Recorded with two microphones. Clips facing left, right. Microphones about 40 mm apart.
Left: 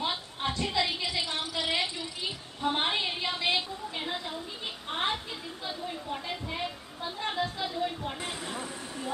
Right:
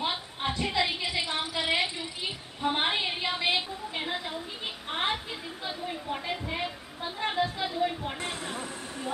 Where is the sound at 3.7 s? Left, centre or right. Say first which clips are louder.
Right 2 dB; centre.